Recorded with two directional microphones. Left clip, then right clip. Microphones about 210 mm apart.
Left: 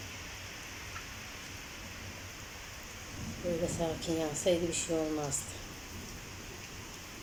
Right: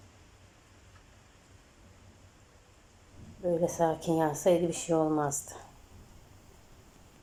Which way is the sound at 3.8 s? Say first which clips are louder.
Right 6 dB; 10° left (ahead or behind).